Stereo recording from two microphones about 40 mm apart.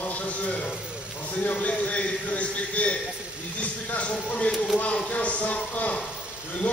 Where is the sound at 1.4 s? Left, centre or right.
Left.